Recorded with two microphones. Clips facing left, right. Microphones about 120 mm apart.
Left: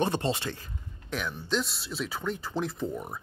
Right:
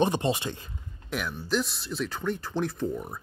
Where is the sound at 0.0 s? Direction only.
15° right (ahead or behind).